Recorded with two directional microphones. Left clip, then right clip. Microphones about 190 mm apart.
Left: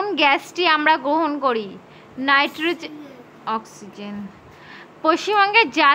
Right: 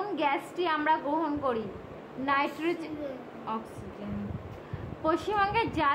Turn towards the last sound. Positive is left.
turn(degrees=30)  # may be behind; listen again after turning